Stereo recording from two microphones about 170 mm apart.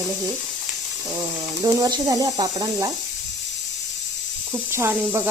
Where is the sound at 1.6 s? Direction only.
20° right (ahead or behind).